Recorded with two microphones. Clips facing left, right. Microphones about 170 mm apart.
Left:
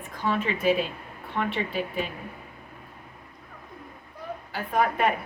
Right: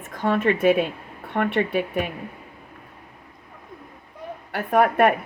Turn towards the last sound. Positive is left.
turn(degrees=-60)  # may be behind; listen again after turning